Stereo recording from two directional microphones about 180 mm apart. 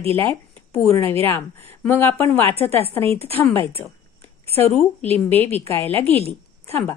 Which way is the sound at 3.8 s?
5° left (ahead or behind).